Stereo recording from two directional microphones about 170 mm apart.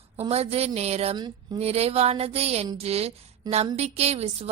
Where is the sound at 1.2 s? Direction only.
25° right (ahead or behind).